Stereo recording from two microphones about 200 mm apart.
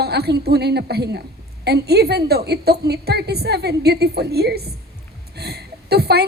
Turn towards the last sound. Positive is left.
turn(degrees=-50)  # may be behind; listen again after turning